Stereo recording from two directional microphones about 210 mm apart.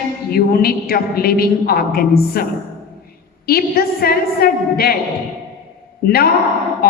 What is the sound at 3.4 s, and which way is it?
A woman's voice, 45° left (ahead or behind).